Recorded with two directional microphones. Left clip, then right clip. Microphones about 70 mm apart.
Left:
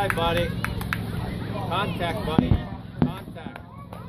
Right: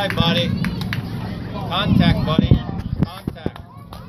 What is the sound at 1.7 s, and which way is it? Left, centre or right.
Speech, left.